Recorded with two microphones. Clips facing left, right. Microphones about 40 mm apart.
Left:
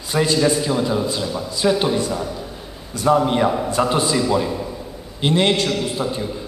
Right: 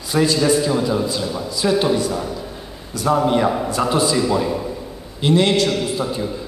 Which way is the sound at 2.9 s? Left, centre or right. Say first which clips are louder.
Even; left.